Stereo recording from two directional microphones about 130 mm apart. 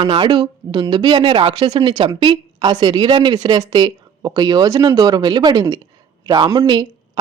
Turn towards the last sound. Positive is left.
turn(degrees=-35)  # may be behind; listen again after turning